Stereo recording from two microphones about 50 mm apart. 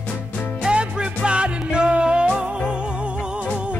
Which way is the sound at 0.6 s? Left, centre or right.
Centre.